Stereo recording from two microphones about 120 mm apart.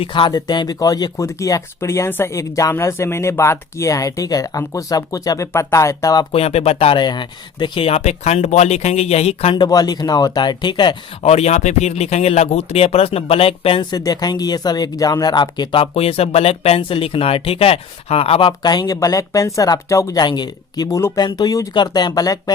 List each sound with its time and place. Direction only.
0.0 s speech: 45° left (ahead or behind); by 6.2 s 30° left (ahead or behind)
6.3 s speech: 55° left (ahead or behind)
9.6 s speech: 35° left (ahead or behind)
11.2 s speech: 60° left (ahead or behind)
13.9 s speech: 30° left (ahead or behind)
15.8 s speech: 55° left (ahead or behind)
18.6 s speech: 35° left (ahead or behind)